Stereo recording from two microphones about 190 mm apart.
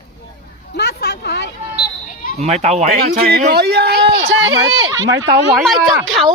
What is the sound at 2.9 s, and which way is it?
Speech, 55° right (ahead or behind).